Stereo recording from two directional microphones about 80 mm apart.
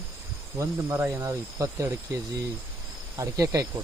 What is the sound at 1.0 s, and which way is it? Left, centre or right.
Speech, right.